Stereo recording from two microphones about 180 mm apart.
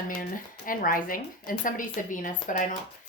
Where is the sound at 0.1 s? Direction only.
50° left (ahead or behind).